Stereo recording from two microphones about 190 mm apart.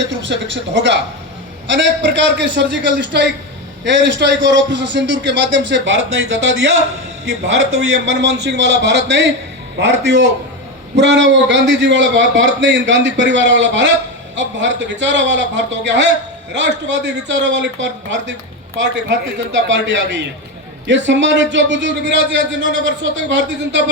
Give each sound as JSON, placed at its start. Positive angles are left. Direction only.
{"t": 0.0, "sound": "a man's voice", "side_deg": -70}